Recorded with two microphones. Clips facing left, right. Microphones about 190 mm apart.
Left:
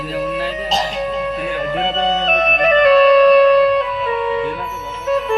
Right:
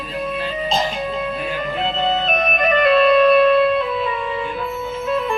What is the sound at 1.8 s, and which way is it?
Music, 80° left.